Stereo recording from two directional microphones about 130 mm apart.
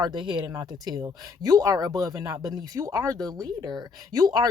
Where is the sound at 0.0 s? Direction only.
40° right (ahead or behind).